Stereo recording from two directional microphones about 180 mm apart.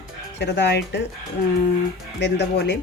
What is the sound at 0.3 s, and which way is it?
Speech, 70° left (ahead or behind).